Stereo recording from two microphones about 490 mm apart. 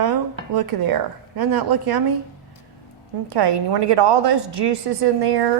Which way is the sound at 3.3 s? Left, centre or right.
Right.